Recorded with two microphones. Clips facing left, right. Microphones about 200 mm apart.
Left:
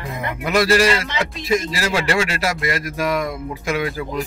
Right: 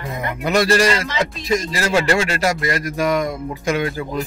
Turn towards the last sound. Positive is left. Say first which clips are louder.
# right 1 dB
turn(degrees=5)  # may be behind; listen again after turning